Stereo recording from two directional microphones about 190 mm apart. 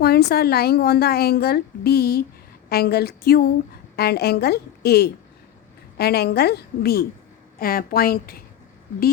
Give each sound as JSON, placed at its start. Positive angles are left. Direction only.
{"t": 0.0, "sound": "a woman's voice", "side_deg": 55}